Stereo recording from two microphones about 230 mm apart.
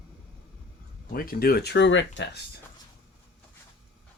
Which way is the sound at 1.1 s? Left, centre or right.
Left.